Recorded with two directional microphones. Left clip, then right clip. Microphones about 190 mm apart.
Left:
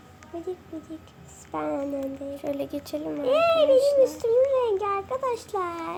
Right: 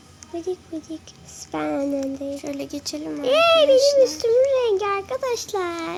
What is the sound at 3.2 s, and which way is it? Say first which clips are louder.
Speech: right 5 dB; 40° right (ahead or behind).